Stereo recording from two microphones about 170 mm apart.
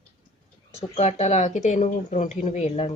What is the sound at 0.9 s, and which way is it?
Speech, 40° left (ahead or behind).